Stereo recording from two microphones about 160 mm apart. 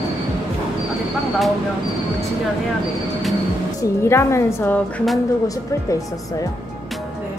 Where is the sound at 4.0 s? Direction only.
15° left (ahead or behind).